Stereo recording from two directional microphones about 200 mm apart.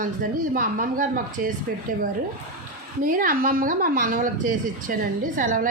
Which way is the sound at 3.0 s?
45° right (ahead or behind).